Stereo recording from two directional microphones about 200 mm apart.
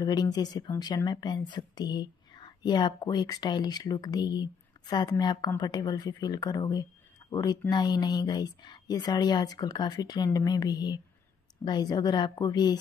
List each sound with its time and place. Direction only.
0.0 s speech: 20° left (ahead or behind)